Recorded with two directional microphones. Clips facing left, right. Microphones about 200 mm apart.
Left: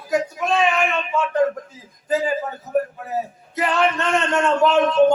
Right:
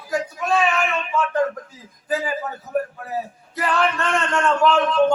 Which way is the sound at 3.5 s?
20° left (ahead or behind).